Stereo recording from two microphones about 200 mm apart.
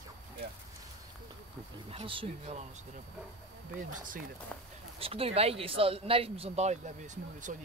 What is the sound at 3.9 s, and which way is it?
Speech, 40° right (ahead or behind).